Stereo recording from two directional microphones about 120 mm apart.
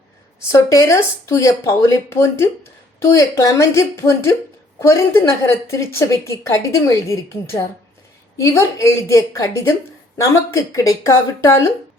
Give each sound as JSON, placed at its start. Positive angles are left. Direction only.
{"t": 0.5, "sound": "a woman's voice", "side_deg": 25}
{"t": 8.4, "sound": "a woman's voice", "side_deg": 25}